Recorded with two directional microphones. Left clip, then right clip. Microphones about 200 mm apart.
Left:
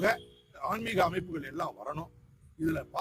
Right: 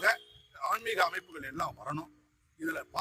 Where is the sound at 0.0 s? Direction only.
Centre (ahead or behind).